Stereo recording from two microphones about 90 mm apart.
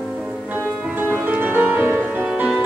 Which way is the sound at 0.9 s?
20° right (ahead or behind).